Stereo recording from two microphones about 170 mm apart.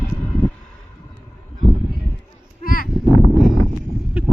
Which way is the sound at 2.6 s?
55° left (ahead or behind).